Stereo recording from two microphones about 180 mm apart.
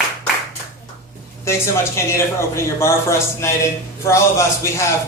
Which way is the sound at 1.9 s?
15° left (ahead or behind).